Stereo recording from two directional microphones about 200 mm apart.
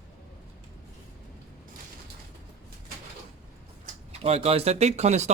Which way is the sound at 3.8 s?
30° right (ahead or behind).